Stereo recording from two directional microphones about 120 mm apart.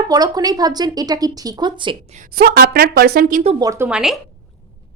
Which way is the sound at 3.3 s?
90° right.